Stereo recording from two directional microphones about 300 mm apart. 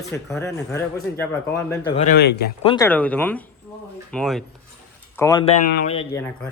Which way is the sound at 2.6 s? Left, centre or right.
Centre.